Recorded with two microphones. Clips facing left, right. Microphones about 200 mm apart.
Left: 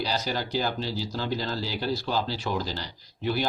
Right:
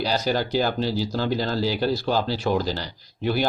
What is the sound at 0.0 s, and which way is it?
Speech, 55° right (ahead or behind).